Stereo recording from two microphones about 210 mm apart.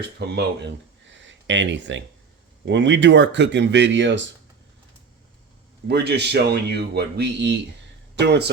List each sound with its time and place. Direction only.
0.2 s speech: 55° right (ahead or behind)
5.9 s speech: 55° right (ahead or behind)